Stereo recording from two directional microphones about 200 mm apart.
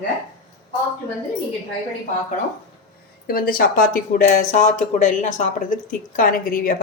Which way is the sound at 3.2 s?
45° left (ahead or behind).